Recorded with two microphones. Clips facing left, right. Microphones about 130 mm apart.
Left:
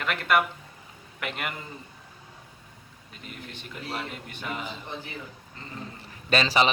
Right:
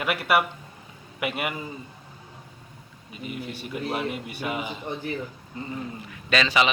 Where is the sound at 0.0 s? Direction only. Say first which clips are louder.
Right 2 dB; 10° right (ahead or behind).